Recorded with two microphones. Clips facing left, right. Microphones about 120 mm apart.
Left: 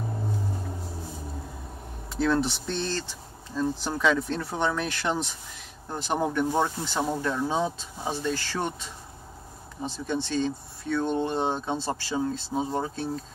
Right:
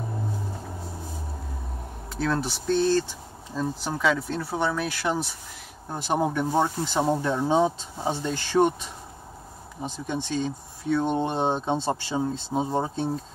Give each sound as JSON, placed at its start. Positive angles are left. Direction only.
{"t": 2.1, "sound": "speech", "side_deg": 0}